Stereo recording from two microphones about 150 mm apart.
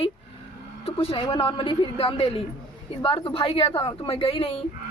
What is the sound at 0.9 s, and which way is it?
A woman's voice, 40° left (ahead or behind).